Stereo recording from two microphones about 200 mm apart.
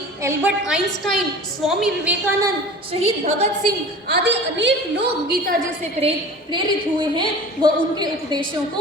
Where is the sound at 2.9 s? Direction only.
30° right (ahead or behind).